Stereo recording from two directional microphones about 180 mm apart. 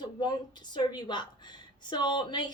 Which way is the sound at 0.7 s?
25° left (ahead or behind).